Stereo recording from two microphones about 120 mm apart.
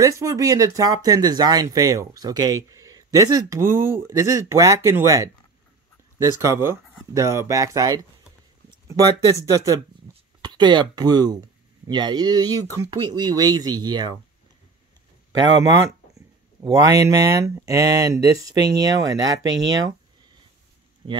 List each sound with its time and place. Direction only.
0.0 s speech: 25° right (ahead or behind)
10.1 s a sound: 40° right (ahead or behind)
10.4 s speech: 40° right (ahead or behind)
16.6 s speech: 30° right (ahead or behind)
21.0 s speech: 45° right (ahead or behind)